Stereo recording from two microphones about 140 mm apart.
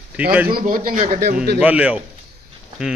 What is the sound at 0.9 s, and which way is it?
Speech, 80° right.